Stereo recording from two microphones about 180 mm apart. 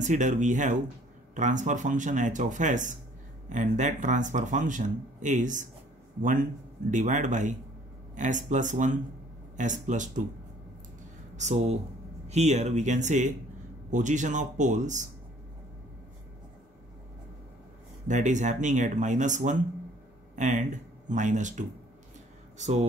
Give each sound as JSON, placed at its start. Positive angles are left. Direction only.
{"t": 0.0, "sound": "speech", "side_deg": -45}
{"t": 6.9, "sound": "speech", "side_deg": -45}
{"t": 11.3, "sound": "speech", "side_deg": -40}
{"t": 18.0, "sound": "speech", "side_deg": -45}